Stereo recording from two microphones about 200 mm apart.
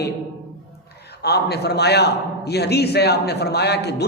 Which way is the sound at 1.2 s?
55° left (ahead or behind).